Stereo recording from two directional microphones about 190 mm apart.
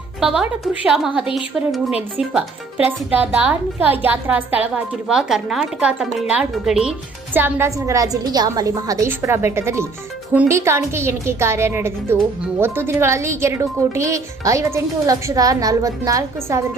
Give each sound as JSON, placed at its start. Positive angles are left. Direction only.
{"t": 0.2, "sound": "a woman's voice", "side_deg": 0}